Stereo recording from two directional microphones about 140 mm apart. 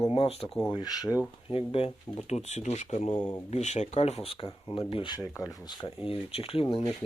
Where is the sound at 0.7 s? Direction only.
30° left (ahead or behind).